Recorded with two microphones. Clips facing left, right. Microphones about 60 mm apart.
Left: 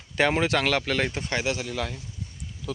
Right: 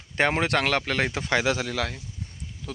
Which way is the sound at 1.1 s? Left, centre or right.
Right.